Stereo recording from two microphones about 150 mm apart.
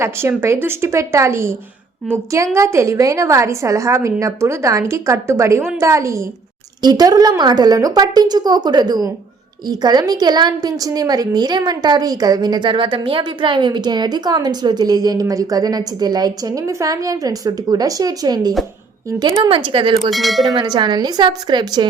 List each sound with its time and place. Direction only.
0.0 s a woman's voice: 20° right (ahead or behind); by 20.0 s 35° right (ahead or behind)
20.1 s a sound: centre (ahead or behind)
20.5 s a woman's voice: 30° right (ahead or behind)